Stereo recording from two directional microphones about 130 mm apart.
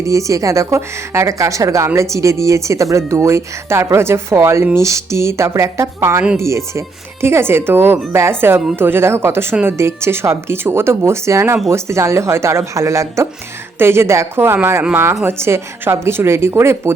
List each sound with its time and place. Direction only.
0.0 s speech: 25° right (ahead or behind)